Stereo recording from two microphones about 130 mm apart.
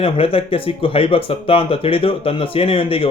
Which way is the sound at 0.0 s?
45° left (ahead or behind).